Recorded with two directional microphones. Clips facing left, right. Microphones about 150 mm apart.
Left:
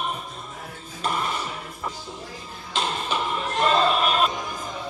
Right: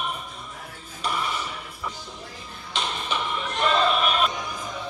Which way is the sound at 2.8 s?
40° left (ahead or behind).